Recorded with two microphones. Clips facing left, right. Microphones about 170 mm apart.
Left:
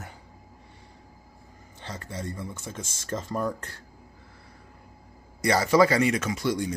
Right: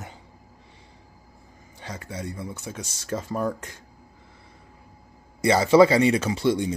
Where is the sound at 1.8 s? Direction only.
10° right (ahead or behind).